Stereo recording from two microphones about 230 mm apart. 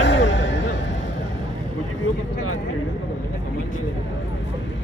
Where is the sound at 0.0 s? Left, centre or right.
Left.